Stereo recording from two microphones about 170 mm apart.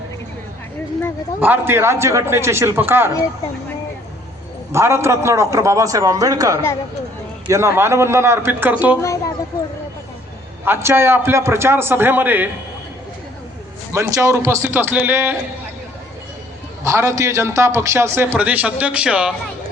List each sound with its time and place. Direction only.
1.4 s a man's voice: 10° right (ahead or behind)
4.7 s a man's voice: 15° right (ahead or behind)
9.0 s speech: 15° left (ahead or behind)
10.7 s a man's voice: 15° right (ahead or behind)
13.9 s a man's voice: 15° right (ahead or behind)
16.8 s a man's voice: 20° right (ahead or behind)